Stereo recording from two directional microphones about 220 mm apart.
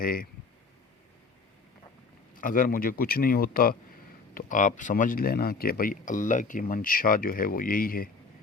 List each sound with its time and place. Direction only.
0.0 s speech: 40° left (ahead or behind)
2.4 s speech: 40° left (ahead or behind)